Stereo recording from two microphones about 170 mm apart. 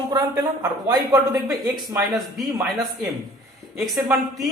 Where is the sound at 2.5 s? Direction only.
20° right (ahead or behind).